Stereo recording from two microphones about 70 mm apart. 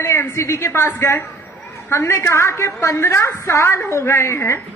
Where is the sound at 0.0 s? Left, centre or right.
Left.